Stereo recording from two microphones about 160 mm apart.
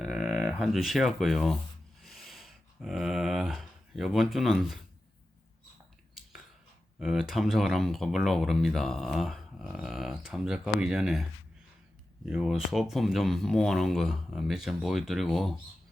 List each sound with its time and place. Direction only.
0.0 s a sound: centre (ahead or behind)
7.0 s speech: 5° right (ahead or behind)
12.2 s speech: 5° right (ahead or behind)